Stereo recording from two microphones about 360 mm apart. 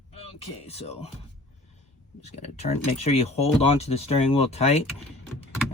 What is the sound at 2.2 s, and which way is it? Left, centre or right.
Speech, centre.